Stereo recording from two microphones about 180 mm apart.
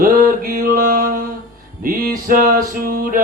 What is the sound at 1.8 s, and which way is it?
Music, 50° right (ahead or behind).